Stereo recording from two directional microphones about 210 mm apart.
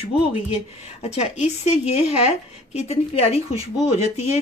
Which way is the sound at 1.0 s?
30° left (ahead or behind).